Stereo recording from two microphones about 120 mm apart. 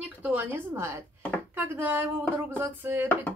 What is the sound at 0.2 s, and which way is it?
A woman's voice, 15° right (ahead or behind).